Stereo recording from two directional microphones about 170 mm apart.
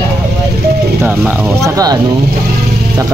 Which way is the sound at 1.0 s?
10° right (ahead or behind).